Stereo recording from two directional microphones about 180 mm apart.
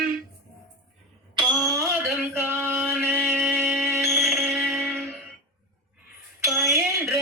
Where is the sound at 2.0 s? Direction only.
10° right (ahead or behind).